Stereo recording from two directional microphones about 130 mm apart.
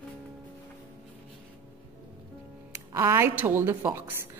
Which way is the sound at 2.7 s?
20° right (ahead or behind).